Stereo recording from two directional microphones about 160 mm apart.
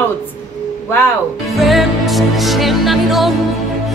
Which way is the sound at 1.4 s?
Centre (ahead or behind).